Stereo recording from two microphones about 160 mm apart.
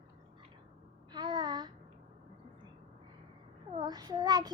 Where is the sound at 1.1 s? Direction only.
25° right (ahead or behind).